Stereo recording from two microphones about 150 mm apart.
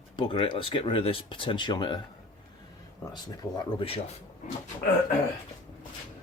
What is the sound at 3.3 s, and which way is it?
Speech, 30° left (ahead or behind).